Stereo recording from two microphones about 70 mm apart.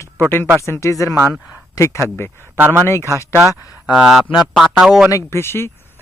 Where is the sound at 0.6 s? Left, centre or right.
Left.